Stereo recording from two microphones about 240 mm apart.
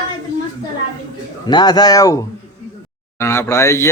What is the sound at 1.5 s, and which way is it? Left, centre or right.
A man's voice, centre.